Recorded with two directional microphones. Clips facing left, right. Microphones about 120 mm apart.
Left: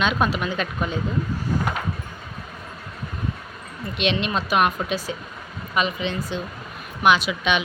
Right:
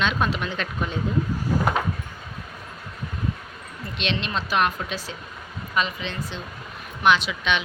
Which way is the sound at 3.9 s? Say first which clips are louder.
Left 4 dB; 15° left (ahead or behind).